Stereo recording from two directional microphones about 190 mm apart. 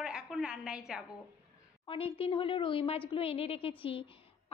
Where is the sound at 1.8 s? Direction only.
30° left (ahead or behind).